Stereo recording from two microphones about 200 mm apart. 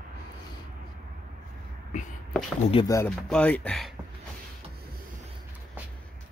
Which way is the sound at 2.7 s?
25° left (ahead or behind).